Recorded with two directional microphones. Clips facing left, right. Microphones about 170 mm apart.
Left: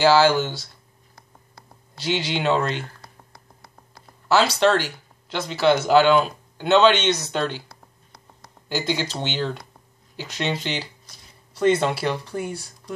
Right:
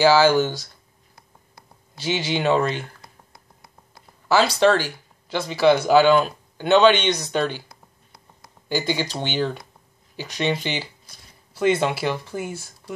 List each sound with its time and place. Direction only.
0.0 s speech: centre (ahead or behind)
2.0 s speech: 5° right (ahead or behind)
4.3 s speech: 5° right (ahead or behind)
8.6 s speech: centre (ahead or behind)